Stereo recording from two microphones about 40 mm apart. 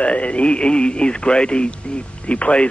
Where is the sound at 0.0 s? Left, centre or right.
Left.